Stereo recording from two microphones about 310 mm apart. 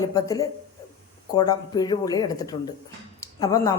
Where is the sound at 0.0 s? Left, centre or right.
Centre.